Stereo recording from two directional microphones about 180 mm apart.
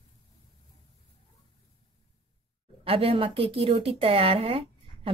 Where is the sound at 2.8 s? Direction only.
30° right (ahead or behind).